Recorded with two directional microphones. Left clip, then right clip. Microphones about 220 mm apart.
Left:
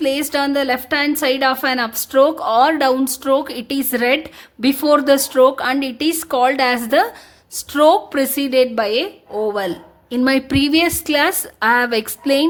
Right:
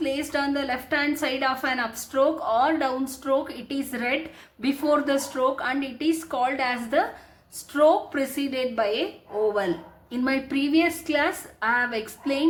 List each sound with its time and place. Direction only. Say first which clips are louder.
0.0 s a woman's voice: left 8 dB; 50° left (ahead or behind)